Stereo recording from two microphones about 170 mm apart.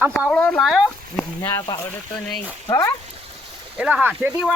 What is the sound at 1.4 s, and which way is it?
Speech, 15° left (ahead or behind).